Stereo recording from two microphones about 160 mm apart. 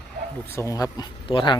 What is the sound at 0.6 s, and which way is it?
Speech, 20° left (ahead or behind).